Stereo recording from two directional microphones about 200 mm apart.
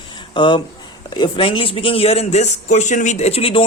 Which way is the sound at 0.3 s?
25° left (ahead or behind).